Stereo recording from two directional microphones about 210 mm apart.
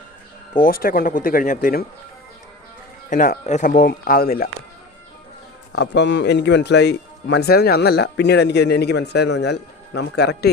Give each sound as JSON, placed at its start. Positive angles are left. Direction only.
{"t": 0.6, "sound": "speech", "side_deg": 45}
{"t": 3.1, "sound": "speech", "side_deg": 40}
{"t": 5.7, "sound": "a man's voice", "side_deg": 55}